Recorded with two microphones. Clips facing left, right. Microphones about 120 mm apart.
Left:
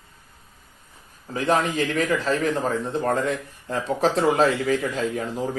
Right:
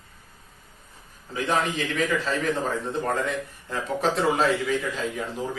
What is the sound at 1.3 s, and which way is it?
Speech, 40° left (ahead or behind).